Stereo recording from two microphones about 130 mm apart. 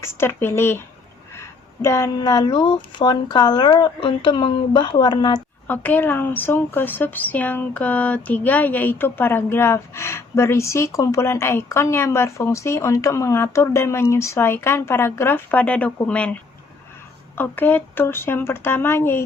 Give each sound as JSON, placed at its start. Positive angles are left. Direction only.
{"t": 0.2, "sound": "a woman's voice", "side_deg": 15}
{"t": 5.6, "sound": "a woman's voice", "side_deg": 15}